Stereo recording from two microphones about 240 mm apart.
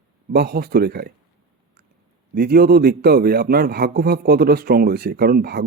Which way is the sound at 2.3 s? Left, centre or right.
Right.